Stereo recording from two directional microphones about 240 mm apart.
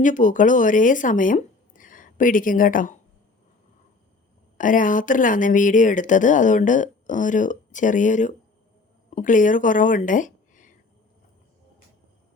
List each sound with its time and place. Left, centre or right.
0.0 s speech: left
4.5 s a woman's voice: left